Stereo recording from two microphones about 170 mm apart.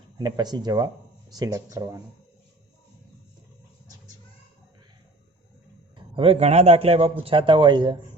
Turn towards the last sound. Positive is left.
turn(degrees=-25)  # may be behind; listen again after turning